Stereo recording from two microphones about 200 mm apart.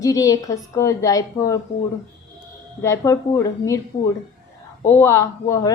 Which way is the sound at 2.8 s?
15° left (ahead or behind).